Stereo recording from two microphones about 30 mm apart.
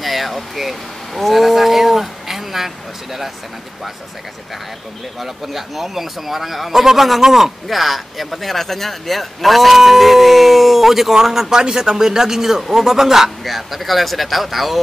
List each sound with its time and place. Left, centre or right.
0.0 s speech: centre
5.2 s a man's voice: centre
7.6 s a man's voice: centre
13.4 s speech: centre